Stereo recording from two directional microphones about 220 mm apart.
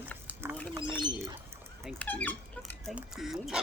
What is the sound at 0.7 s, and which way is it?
Bird, 20° right (ahead or behind).